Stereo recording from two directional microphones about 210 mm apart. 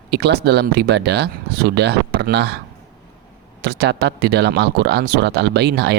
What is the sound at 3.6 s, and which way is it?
Speech, 50° right (ahead or behind).